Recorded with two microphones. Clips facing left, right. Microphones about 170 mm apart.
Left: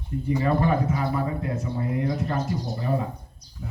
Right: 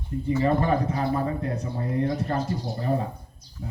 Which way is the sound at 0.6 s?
35° right (ahead or behind).